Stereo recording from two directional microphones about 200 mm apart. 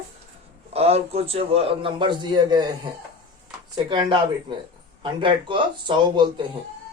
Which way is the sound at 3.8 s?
25° right (ahead or behind).